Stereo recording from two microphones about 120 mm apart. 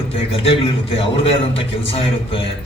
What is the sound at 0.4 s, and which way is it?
A man's voice, 50° left (ahead or behind).